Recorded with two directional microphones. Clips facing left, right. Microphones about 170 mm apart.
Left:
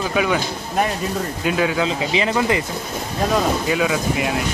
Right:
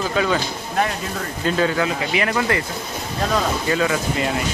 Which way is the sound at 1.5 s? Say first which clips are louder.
Right 1 dB; 10° left (ahead or behind).